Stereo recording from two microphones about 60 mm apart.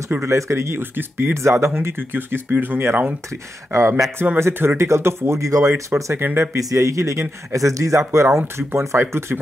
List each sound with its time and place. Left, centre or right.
0.2 s speech: right
3.3 s speech: right
5.5 s a man's voice: right
6.1 s speech: right
6.7 s a man's voice: right